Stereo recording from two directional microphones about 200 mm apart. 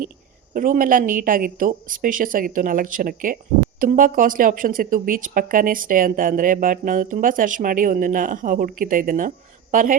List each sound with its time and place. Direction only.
0.5 s speech: 40° right (ahead or behind)